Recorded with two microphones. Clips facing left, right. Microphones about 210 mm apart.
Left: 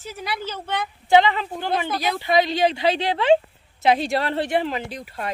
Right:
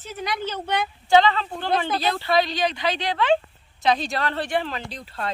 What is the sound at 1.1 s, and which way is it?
A woman's voice, 20° left (ahead or behind).